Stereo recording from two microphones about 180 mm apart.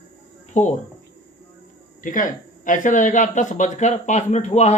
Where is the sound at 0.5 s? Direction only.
40° left (ahead or behind).